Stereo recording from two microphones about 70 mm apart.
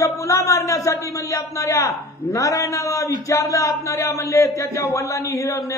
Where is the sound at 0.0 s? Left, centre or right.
Left.